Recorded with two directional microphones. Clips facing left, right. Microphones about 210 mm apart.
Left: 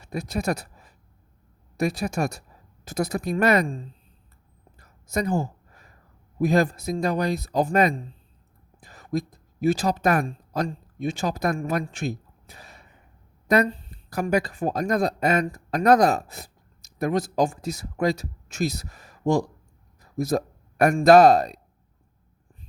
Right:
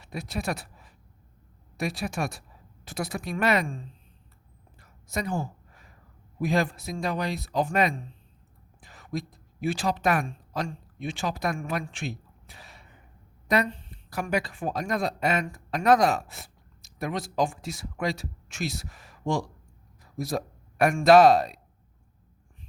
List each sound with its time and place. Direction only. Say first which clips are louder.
0.0 s a woman's voice: left 5 dB; 45° left (ahead or behind)
4.8 s a sound: left 5 dB; 40° left (ahead or behind)
6.4 s speech: left 5 dB; 40° left (ahead or behind)